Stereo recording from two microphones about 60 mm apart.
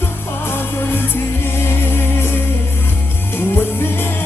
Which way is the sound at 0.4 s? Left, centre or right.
Left.